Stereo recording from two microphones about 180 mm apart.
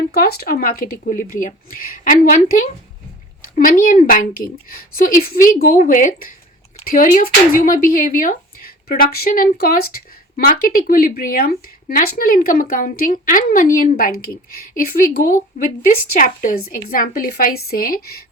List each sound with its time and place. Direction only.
0.1 s speech: 60° left (ahead or behind)